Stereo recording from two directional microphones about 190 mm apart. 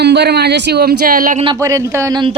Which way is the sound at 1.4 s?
20° right (ahead or behind).